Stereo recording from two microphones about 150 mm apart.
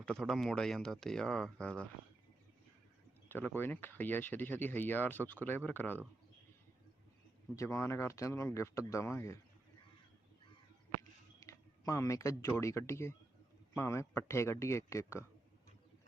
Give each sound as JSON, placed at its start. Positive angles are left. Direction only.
{"t": 0.0, "sound": "speech", "side_deg": 5}
{"t": 3.2, "sound": "speech", "side_deg": 15}
{"t": 7.5, "sound": "speech", "side_deg": 20}
{"t": 11.3, "sound": "speech", "side_deg": 20}